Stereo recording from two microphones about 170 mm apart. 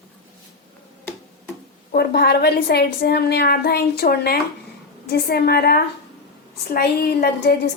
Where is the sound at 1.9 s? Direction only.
70° left (ahead or behind).